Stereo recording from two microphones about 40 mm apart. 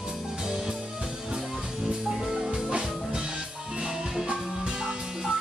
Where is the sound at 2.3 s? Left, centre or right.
Centre.